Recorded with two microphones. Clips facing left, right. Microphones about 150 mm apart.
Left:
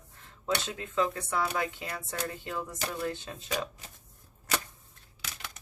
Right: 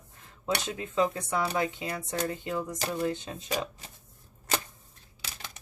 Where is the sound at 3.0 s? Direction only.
20° right (ahead or behind).